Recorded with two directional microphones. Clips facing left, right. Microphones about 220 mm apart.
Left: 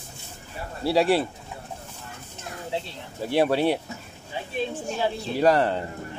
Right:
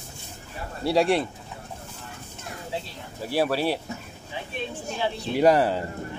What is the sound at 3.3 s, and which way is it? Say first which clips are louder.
Speech: left 3 dB; 20° left (ahead or behind).